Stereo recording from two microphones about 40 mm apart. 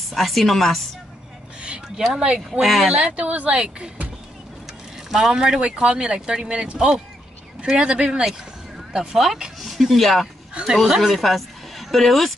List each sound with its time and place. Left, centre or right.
0.1 s speech: centre
2.1 s speech: right
2.6 s speech: centre
2.9 s a woman's voice: right
5.1 s speech: centre
8.3 s a sound: centre
9.1 s speech: centre